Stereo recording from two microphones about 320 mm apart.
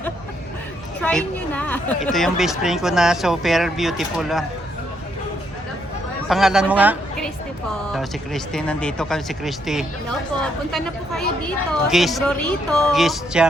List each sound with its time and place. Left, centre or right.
1.0 s a woman's voice: centre
6.2 s a woman's voice: centre